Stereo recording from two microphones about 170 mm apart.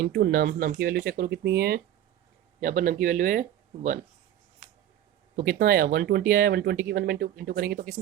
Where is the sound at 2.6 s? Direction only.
50° right (ahead or behind).